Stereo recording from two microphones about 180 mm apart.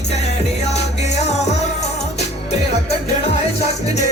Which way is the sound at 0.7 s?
40° left (ahead or behind).